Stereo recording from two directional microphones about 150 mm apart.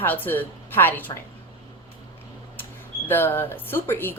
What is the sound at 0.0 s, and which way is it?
Speech, 15° left (ahead or behind).